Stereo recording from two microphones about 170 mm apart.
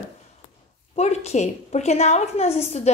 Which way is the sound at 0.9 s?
40° left (ahead or behind).